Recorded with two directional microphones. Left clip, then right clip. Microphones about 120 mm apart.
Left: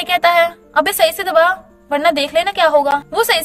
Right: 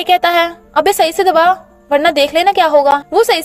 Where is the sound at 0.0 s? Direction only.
40° right (ahead or behind).